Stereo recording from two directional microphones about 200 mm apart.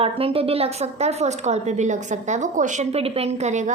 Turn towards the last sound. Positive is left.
turn(degrees=-35)  # may be behind; listen again after turning